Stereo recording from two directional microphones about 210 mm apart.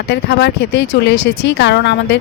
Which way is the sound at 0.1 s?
55° left (ahead or behind).